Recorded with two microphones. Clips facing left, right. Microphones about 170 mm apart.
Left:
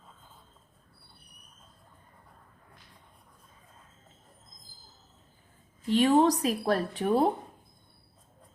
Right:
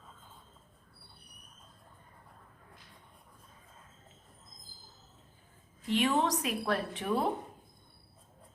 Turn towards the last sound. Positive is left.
turn(degrees=35)  # may be behind; listen again after turning